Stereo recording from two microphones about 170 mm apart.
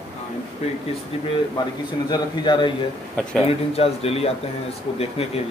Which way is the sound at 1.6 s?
25° left (ahead or behind).